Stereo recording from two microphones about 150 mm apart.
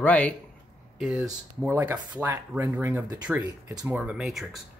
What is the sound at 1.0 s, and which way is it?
Speech, 5° right (ahead or behind).